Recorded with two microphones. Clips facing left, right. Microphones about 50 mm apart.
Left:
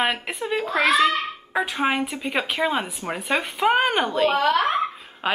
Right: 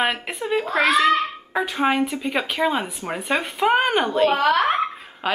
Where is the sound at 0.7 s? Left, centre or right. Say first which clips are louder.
Even; right.